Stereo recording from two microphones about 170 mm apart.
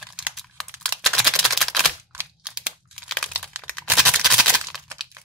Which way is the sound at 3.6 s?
5° left (ahead or behind).